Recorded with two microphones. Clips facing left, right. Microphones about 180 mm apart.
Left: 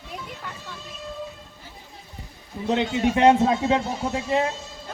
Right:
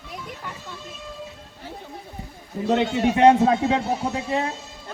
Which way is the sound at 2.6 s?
45° right (ahead or behind).